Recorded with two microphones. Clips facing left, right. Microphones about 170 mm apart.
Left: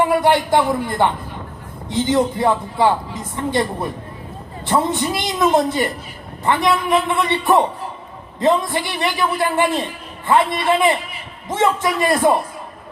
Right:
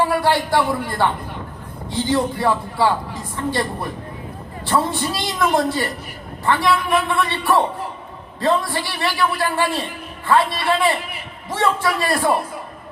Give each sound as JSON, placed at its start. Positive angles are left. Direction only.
{"t": 0.0, "sound": "a man's voice", "side_deg": 20}